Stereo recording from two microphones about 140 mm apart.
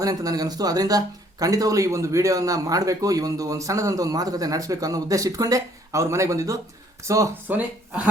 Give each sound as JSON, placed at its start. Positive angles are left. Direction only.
{"t": 0.0, "sound": "speech", "side_deg": -25}